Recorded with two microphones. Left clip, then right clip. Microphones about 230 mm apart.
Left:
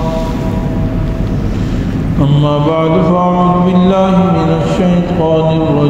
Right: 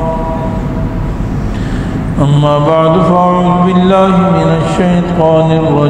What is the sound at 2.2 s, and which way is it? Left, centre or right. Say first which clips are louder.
Mantra: right 3 dB; right.